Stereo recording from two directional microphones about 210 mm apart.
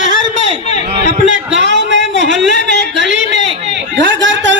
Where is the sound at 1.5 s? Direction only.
60° right (ahead or behind).